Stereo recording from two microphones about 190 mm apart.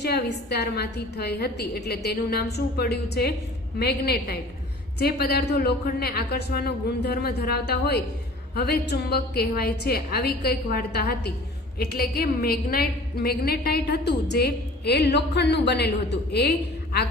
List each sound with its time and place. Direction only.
0.0 s a woman's voice: 60° left (ahead or behind)